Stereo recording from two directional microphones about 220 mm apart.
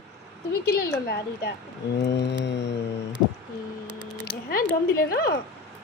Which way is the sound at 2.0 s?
50° left (ahead or behind).